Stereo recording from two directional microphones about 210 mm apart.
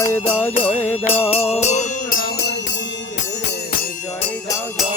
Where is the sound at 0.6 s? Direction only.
10° left (ahead or behind).